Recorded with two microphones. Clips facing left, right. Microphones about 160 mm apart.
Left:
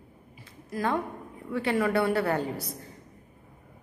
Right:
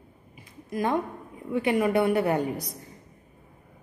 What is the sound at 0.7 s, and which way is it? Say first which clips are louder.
A woman's voice: right 2 dB; 20° right (ahead or behind).